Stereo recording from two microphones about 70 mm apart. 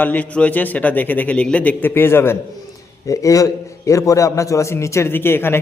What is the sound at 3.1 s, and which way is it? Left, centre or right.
A man's voice, left.